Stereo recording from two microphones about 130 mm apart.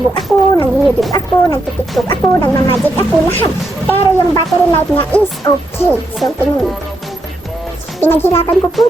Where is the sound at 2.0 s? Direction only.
5° left (ahead or behind).